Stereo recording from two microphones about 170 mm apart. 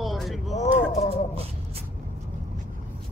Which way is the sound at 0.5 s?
40° left (ahead or behind).